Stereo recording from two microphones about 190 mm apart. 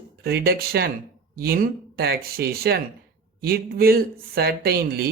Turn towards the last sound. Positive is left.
turn(degrees=-55)  # may be behind; listen again after turning